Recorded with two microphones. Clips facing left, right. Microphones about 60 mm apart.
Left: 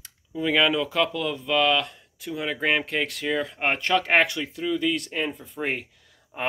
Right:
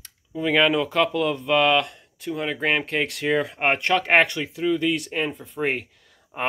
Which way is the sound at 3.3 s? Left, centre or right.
Right.